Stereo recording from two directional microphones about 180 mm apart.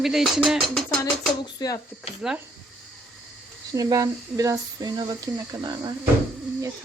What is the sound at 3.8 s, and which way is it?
Speech, 20° right (ahead or behind).